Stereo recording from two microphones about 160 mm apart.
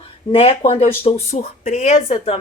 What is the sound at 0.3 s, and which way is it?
A woman's voice, 40° left (ahead or behind).